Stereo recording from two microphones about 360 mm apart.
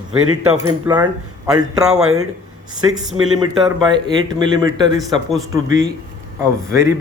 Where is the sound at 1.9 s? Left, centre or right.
Right.